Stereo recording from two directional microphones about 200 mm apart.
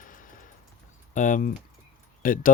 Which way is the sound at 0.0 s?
40° left (ahead or behind).